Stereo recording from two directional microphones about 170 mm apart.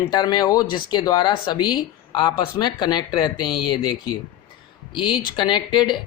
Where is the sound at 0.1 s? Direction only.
25° left (ahead or behind).